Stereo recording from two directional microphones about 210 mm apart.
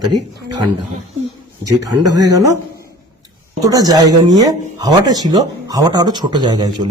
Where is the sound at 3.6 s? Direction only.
15° right (ahead or behind).